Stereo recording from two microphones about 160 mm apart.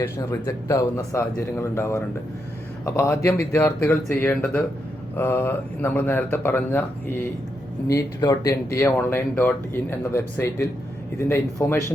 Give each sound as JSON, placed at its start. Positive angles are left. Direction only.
{"t": 0.0, "sound": "speech", "side_deg": 20}
{"t": 7.9, "sound": "speech", "side_deg": 20}